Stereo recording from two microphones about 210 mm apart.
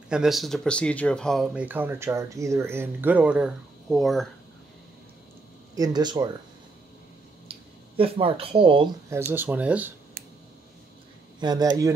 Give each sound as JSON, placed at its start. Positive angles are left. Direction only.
{"t": 0.1, "sound": "speech", "side_deg": 0}
{"t": 5.8, "sound": "speech", "side_deg": -20}
{"t": 8.0, "sound": "speech", "side_deg": -25}
{"t": 9.1, "sound": "speech", "side_deg": -10}
{"t": 10.2, "sound": "a sound", "side_deg": -45}
{"t": 11.3, "sound": "speech", "side_deg": -20}